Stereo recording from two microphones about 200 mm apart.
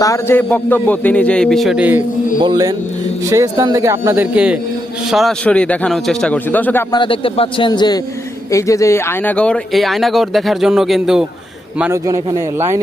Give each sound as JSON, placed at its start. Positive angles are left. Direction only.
{"t": 0.0, "sound": "a man's voice", "side_deg": 15}
{"t": 2.4, "sound": "a man's voice", "side_deg": -20}
{"t": 6.9, "sound": "a man's voice", "side_deg": 25}
{"t": 11.8, "sound": "a man's voice", "side_deg": -15}